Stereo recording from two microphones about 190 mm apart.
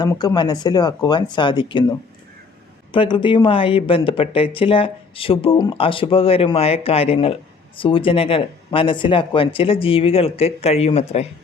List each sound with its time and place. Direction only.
0.0 s speech: 20° left (ahead or behind)
2.9 s speech: 25° left (ahead or behind)